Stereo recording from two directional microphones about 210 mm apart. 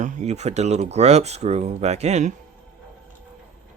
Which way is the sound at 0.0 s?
35° right (ahead or behind).